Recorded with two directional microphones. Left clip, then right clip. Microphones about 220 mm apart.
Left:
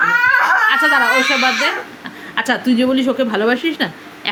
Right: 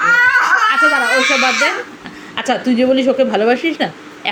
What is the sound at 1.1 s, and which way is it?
A woman's voice, centre (ahead or behind).